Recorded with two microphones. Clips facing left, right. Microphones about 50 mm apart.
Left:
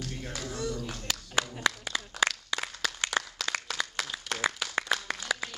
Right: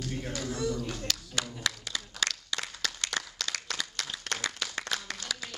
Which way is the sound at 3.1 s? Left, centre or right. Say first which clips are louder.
Left 4 dB; centre.